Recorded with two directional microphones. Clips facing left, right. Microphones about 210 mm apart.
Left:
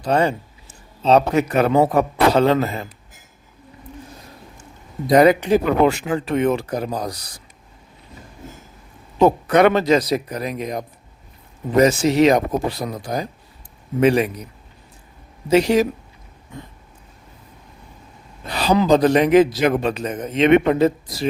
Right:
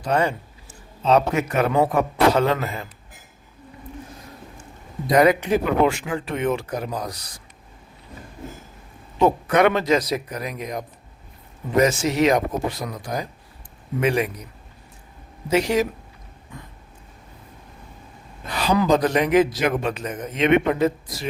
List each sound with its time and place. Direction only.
0.1 s a man's voice: 30° left (ahead or behind)
5.0 s a man's voice: 30° left (ahead or behind)
9.2 s a man's voice: 35° left (ahead or behind)
15.4 s a man's voice: 35° left (ahead or behind)
18.5 s a man's voice: 30° left (ahead or behind)